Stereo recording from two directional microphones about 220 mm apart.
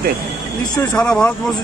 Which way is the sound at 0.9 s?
5° left (ahead or behind).